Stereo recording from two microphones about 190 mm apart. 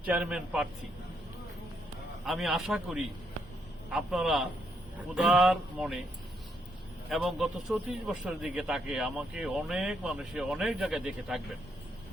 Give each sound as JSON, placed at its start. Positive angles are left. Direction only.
{"t": 0.0, "sound": "a man's voice", "side_deg": -5}
{"t": 2.2, "sound": "a man's voice", "side_deg": 0}
{"t": 7.1, "sound": "a man's voice", "side_deg": 0}